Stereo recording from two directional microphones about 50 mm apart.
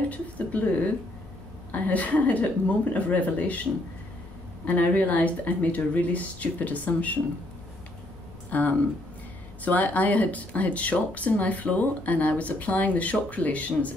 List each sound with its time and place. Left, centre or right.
0.1 s speech: left
4.6 s speech: left
8.5 s speech: left